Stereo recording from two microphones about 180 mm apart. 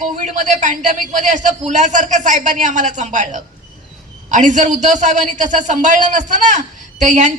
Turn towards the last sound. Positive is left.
turn(degrees=-45)  # may be behind; listen again after turning